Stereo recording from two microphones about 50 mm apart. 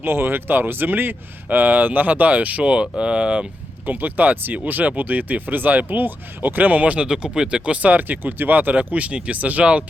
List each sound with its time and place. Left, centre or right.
0.0 s speech: right
3.8 s speech: right
7.1 s speech: centre